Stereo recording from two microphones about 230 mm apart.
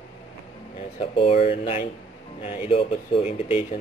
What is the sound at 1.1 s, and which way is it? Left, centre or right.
Speech, left.